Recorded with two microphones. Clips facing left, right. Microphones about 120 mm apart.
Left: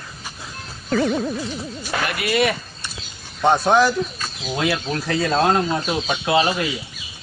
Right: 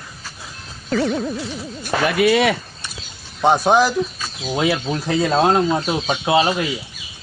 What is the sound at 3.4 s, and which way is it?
Speech, 10° right (ahead or behind).